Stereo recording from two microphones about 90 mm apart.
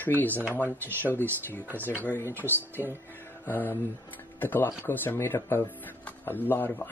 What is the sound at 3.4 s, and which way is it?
Speech, 25° left (ahead or behind).